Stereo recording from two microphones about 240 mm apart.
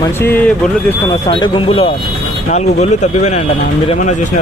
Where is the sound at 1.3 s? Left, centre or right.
Left.